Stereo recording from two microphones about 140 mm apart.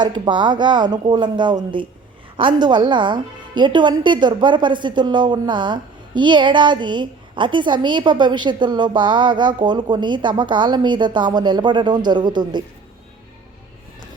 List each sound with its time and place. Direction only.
0.0 s a woman's voice: 35° right (ahead or behind)